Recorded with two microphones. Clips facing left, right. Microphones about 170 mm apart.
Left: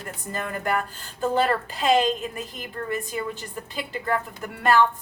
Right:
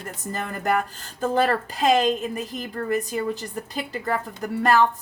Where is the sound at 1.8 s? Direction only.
45° right (ahead or behind).